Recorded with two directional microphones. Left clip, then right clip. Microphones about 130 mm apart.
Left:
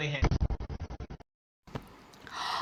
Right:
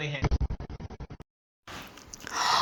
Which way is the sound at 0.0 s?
Centre (ahead or behind).